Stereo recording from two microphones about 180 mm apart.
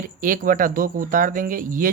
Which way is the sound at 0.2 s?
50° right (ahead or behind).